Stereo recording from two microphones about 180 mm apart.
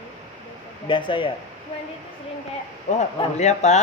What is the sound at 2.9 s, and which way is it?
Speech, 40° left (ahead or behind).